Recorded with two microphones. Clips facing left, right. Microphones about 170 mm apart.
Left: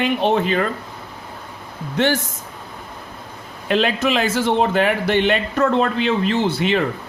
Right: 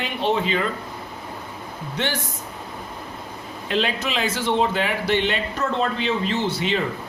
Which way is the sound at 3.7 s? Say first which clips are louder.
Left 6 dB; 55° left (ahead or behind).